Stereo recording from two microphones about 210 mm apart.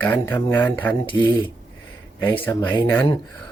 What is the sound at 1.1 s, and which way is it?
Speech, 20° left (ahead or behind).